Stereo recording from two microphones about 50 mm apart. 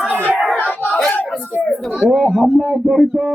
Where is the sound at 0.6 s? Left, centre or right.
Left.